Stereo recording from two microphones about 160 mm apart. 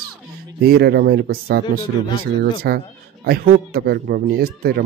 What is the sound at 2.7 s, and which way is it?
Speech, 80° right.